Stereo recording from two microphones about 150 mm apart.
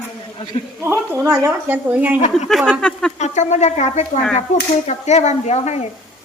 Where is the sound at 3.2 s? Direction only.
50° left (ahead or behind).